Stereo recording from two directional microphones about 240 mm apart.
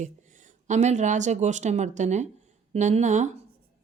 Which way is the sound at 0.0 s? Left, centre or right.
Right.